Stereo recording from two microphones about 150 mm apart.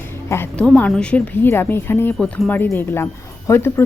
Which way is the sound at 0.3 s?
15° left (ahead or behind).